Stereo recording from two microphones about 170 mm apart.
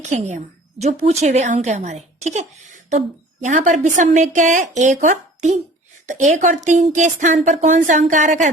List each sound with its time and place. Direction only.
0.0 s a woman's voice: 45° right (ahead or behind)